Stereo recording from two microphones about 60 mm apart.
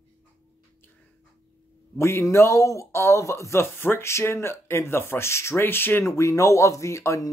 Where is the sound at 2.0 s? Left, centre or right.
Left.